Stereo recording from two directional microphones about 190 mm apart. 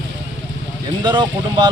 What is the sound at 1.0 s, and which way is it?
Speech, 25° right (ahead or behind).